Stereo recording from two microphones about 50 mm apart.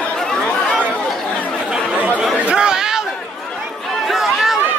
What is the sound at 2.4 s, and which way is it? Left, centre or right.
Chatter, right.